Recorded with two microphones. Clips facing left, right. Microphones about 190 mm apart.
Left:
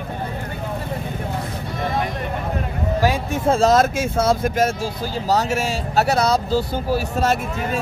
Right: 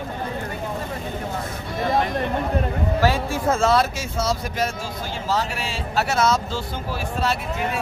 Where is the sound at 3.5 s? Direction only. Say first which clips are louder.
Left 4 dB; 40° left (ahead or behind).